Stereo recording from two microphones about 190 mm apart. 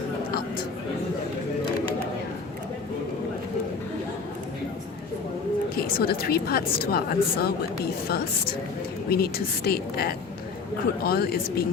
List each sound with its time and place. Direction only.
5.7 s a woman's voice: 55° left (ahead or behind)